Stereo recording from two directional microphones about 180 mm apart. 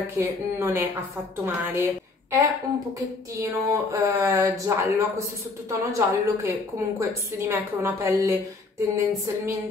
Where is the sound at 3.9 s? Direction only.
15° right (ahead or behind).